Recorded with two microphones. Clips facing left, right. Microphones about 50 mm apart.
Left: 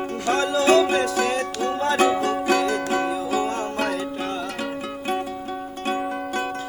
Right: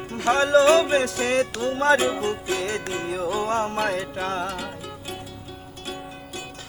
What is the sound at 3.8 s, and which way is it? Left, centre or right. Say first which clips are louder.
Music: even; right.